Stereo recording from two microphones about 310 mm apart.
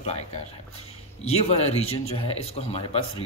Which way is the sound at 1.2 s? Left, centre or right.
Centre.